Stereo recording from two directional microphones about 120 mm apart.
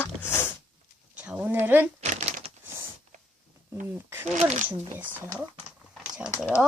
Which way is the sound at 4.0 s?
20° right (ahead or behind).